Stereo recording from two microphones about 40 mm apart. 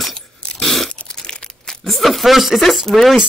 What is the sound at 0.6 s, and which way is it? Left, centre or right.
Chewing, centre.